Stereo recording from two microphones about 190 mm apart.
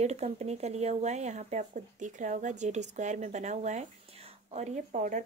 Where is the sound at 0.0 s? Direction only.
35° right (ahead or behind).